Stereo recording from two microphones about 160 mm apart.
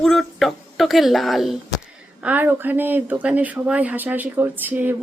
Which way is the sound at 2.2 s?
10° right (ahead or behind).